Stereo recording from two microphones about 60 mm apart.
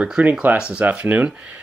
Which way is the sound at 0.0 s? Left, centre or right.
Right.